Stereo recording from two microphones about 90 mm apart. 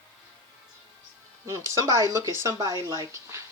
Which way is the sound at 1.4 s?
35° right (ahead or behind).